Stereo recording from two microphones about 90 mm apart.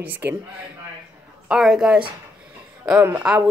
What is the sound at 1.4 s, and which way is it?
Speech, 5° right (ahead or behind).